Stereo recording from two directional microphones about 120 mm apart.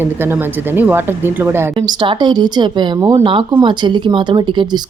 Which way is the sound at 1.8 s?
45° right (ahead or behind).